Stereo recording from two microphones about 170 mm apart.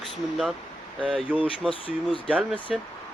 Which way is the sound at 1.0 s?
5° right (ahead or behind).